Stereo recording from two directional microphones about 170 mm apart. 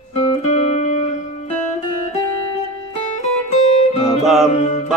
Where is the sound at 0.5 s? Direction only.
40° left (ahead or behind).